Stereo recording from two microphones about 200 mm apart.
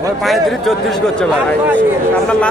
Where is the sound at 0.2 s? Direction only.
Centre (ahead or behind).